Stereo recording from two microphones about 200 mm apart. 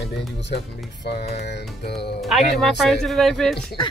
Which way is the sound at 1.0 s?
55° left (ahead or behind).